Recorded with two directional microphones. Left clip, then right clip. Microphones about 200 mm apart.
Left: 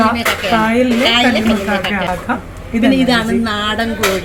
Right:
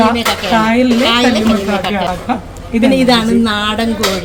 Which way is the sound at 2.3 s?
5° left (ahead or behind).